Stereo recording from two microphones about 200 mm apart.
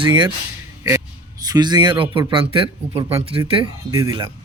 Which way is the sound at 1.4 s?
20° right (ahead or behind).